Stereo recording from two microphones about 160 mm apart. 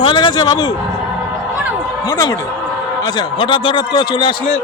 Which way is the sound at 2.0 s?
25° left (ahead or behind).